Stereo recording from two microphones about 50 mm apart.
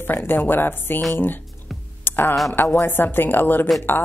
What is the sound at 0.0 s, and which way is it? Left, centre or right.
Speech, left.